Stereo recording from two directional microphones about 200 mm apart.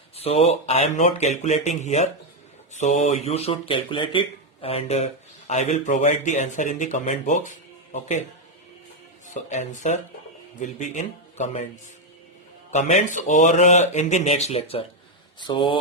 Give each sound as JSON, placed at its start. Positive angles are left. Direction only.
{"t": 0.2, "sound": "speech", "side_deg": 30}
{"t": 9.3, "sound": "speech", "side_deg": 35}
{"t": 12.7, "sound": "speech", "side_deg": 35}